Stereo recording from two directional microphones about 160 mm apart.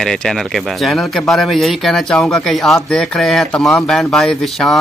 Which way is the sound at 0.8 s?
Centre (ahead or behind).